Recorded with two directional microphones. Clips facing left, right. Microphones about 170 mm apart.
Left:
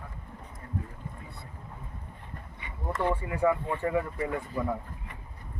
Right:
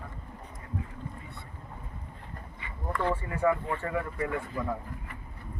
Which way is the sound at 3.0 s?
15° left (ahead or behind).